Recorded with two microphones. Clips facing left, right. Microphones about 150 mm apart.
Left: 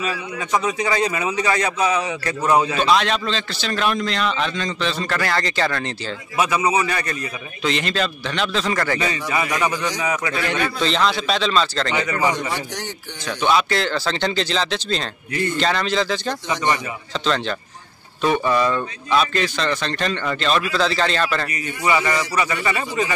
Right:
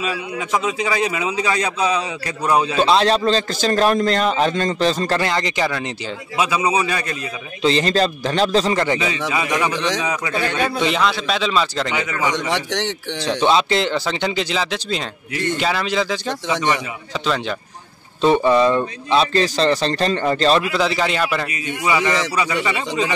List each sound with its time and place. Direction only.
0.8 s speech: 10° right (ahead or behind)
2.8 s a man's voice: 30° right (ahead or behind)
5.2 s speech: 15° right (ahead or behind)
7.6 s a man's voice: 35° right (ahead or behind)
8.7 s speech: 20° right (ahead or behind)
10.8 s speech: 5° right (ahead or behind)
12.4 s a man's voice: 90° right
13.2 s speech: 30° right (ahead or behind); by 17.6 s 10° right (ahead or behind)
18.2 s a man's voice: 25° right (ahead or behind)
20.7 s speech: 15° right (ahead or behind)